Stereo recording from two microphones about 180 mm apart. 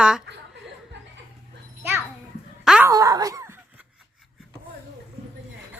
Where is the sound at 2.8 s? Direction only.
20° right (ahead or behind).